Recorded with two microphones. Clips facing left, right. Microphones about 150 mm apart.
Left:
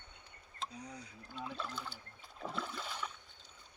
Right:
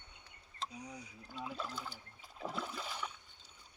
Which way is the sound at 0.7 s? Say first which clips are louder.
Even; 20° right (ahead or behind).